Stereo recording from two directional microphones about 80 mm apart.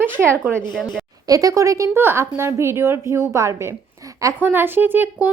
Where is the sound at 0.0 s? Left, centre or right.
Right.